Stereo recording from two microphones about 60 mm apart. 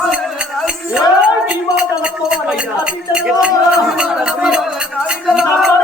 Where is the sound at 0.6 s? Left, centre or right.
Centre.